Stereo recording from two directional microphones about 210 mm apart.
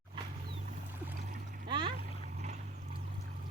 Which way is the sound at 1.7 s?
25° right (ahead or behind).